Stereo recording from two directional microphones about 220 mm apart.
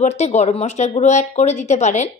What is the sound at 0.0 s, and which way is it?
Speech, 30° left (ahead or behind).